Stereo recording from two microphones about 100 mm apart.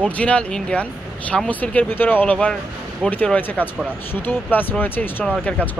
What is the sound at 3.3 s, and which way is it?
Speech, 20° left (ahead or behind).